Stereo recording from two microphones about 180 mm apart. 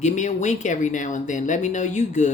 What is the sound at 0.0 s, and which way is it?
Speech, 40° left (ahead or behind).